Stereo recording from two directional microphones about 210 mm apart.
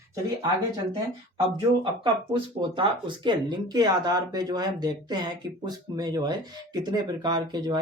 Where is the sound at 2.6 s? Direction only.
20° right (ahead or behind).